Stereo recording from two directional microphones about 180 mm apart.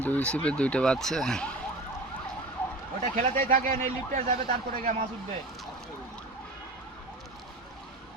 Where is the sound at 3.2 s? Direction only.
50° right (ahead or behind).